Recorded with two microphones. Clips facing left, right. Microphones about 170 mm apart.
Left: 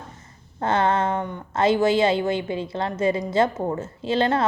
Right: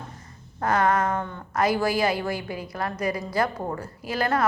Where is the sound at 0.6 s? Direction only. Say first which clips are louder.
Left 1 dB; 25° left (ahead or behind).